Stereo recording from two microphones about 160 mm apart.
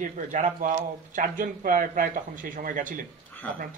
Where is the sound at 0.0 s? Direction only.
55° right (ahead or behind).